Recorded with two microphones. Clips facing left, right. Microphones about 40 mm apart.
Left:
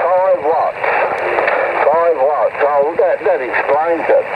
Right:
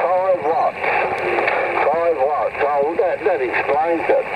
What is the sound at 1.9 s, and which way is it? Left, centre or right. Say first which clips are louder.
Radio: left 5 dB; centre.